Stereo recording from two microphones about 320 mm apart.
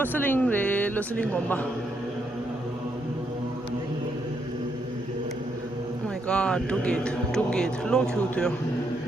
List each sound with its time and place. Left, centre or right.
0.0 s speech: centre
6.2 s speech: centre